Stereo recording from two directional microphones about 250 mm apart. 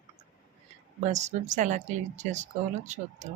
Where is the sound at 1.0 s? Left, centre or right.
Right.